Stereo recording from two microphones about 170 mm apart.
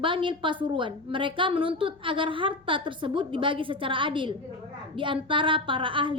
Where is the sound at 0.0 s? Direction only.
30° right (ahead or behind).